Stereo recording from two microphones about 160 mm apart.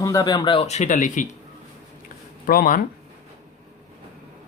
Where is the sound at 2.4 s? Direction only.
65° left (ahead or behind).